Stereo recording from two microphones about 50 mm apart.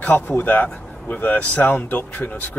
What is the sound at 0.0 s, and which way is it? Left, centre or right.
Speech, left.